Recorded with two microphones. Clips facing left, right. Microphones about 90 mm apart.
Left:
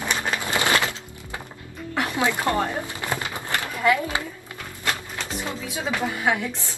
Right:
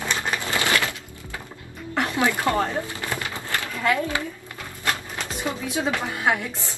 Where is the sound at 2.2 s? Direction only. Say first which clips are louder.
Right 1 dB; 20° left (ahead or behind).